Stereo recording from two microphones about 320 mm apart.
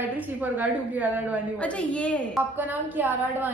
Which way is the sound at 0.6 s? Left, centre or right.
Centre.